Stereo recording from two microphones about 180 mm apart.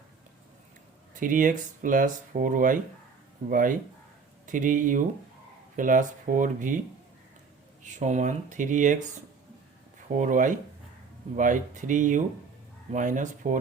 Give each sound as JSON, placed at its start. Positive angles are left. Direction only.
{"t": 1.1, "sound": "speech", "side_deg": -50}
{"t": 7.9, "sound": "speech", "side_deg": -40}
{"t": 10.2, "sound": "speech", "side_deg": -45}